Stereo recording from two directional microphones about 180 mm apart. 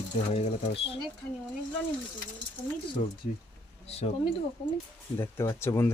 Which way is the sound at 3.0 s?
45° left (ahead or behind).